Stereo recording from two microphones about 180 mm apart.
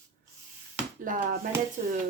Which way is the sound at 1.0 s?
50° right (ahead or behind).